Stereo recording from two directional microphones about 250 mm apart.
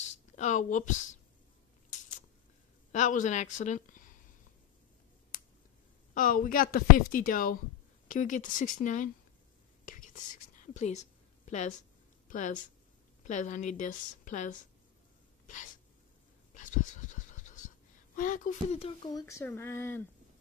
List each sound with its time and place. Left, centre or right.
0.0 s a sound: left
2.9 s a woman's voice: left
6.1 s a woman's voice: left
9.8 s whispering: left
12.3 s a woman's voice: left
15.4 s sneeze: left
16.5 s pant: left; by 20.0 s centre